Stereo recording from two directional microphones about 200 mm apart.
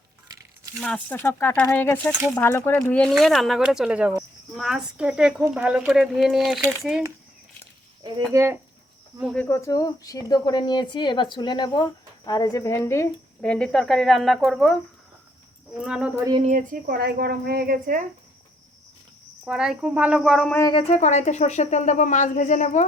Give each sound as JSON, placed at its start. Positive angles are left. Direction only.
{"t": 0.8, "sound": "speech", "side_deg": 5}
{"t": 8.1, "sound": "speech", "side_deg": -15}
{"t": 9.1, "sound": "speech", "side_deg": 0}
{"t": 15.8, "sound": "speech", "side_deg": -5}
{"t": 16.4, "sound": "speech", "side_deg": -40}
{"t": 19.5, "sound": "speech", "side_deg": 0}
{"t": 20.6, "sound": "speech", "side_deg": 25}